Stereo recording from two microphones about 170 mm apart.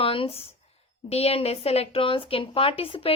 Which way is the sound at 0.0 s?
35° left (ahead or behind).